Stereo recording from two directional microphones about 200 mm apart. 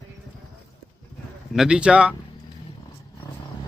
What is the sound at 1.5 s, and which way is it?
Speech, 5° right (ahead or behind).